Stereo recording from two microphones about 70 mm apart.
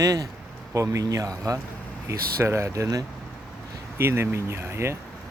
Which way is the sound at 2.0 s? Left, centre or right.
Right.